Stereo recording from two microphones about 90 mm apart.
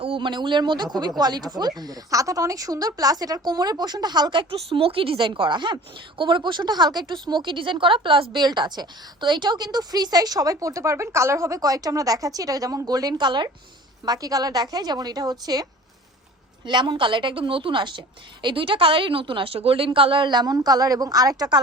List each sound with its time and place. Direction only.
0.0 s a woman's voice: 70° right (ahead or behind)
8.4 s a woman's voice: 55° right (ahead or behind)
14.0 s a woman's voice: 45° right (ahead or behind)
16.6 s a woman's voice: 60° right (ahead or behind)